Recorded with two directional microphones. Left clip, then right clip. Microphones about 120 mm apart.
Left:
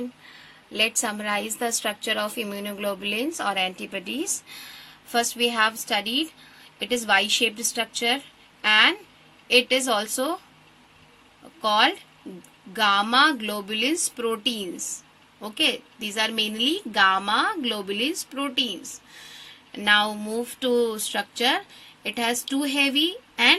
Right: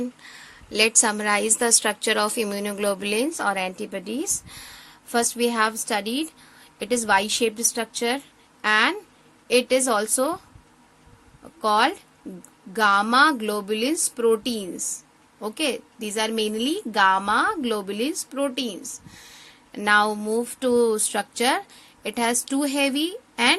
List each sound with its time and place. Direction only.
0.3 s a woman's voice: 40° right (ahead or behind)
11.6 s a woman's voice: 35° right (ahead or behind)